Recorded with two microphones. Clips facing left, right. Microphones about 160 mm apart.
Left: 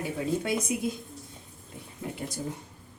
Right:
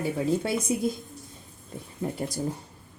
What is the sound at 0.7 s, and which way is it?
Speech, 35° right (ahead or behind).